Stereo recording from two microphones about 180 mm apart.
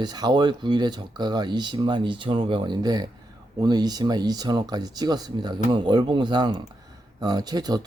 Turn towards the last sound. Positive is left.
turn(degrees=-20)  # may be behind; listen again after turning